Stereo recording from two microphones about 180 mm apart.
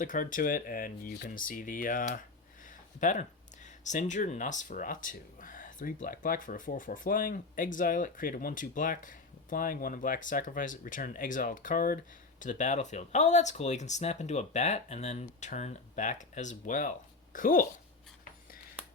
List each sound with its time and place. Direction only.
0.0 s speech: 45° left (ahead or behind)